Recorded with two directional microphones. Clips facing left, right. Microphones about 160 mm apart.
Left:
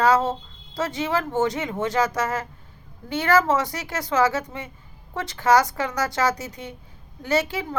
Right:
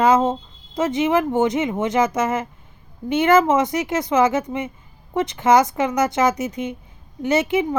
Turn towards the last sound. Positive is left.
turn(degrees=-20)  # may be behind; listen again after turning